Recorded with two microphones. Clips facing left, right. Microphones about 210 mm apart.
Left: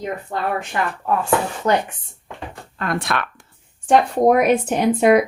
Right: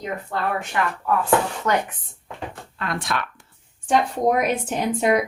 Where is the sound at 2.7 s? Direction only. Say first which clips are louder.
Left 4 dB; 50° left (ahead or behind).